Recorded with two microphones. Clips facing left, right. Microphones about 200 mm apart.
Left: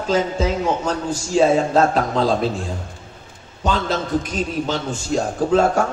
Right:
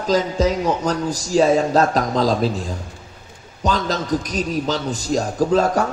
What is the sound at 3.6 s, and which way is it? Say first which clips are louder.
Speech: even; 40° right (ahead or behind).